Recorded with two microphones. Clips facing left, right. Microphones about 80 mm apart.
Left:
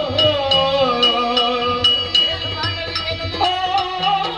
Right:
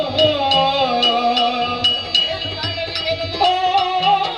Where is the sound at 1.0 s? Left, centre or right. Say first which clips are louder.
Right 1 dB; left.